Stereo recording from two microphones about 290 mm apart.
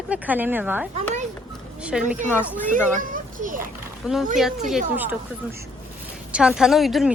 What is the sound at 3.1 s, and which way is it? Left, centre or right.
Children playing, right.